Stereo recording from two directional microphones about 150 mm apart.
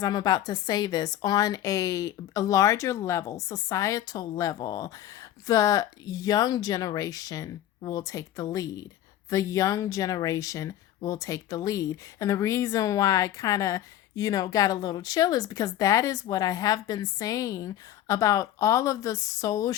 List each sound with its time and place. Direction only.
0.0 s a woman's voice: 25° left (ahead or behind)